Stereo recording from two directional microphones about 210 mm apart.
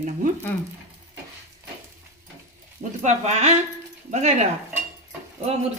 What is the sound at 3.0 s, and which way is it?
Speech, 35° right (ahead or behind).